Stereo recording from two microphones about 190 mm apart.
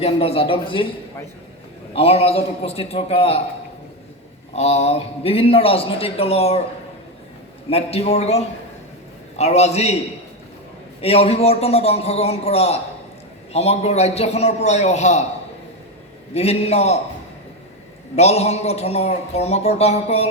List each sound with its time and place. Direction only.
0.0 s a man's voice: 30° left (ahead or behind)
2.0 s speech: 30° left (ahead or behind)
4.5 s speech: 35° left (ahead or behind)
7.7 s speech: 30° left (ahead or behind)
11.0 s speech: 30° left (ahead or behind)
16.3 s speech: 35° left (ahead or behind)
18.2 s speech: 35° left (ahead or behind)